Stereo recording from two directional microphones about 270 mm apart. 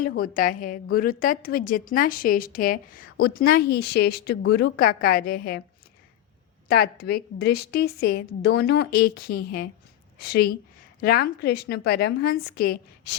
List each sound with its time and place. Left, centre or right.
0.0 s a woman's voice: left
6.7 s a woman's voice: left